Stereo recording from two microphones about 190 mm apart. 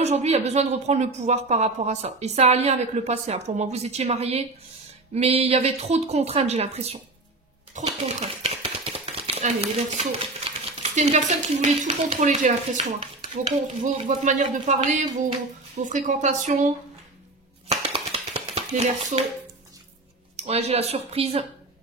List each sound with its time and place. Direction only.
0.0 s speech: 35° right (ahead or behind)
17.6 s a sound: 30° right (ahead or behind)
20.3 s speech: 35° right (ahead or behind)